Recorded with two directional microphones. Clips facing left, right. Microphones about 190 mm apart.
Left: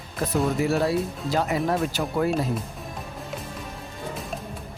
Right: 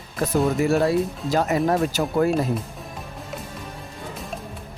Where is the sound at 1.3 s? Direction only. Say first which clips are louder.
Right 4 dB; 45° right (ahead or behind).